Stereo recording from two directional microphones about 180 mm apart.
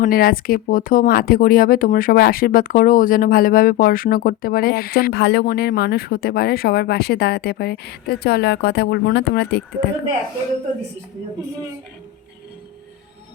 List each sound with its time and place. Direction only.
0.0 s speech: 55° left (ahead or behind)